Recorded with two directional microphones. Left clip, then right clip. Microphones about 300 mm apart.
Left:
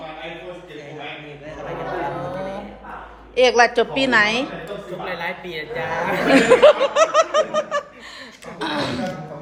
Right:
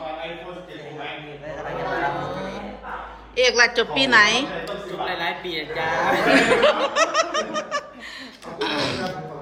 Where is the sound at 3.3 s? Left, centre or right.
Centre.